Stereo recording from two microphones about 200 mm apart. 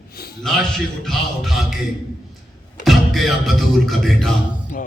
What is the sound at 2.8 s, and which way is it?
Music, centre (ahead or behind).